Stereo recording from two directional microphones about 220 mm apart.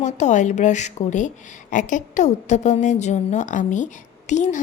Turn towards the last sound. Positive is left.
turn(degrees=35)  # may be behind; listen again after turning